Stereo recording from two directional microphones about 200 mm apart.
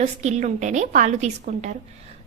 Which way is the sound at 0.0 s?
35° right (ahead or behind).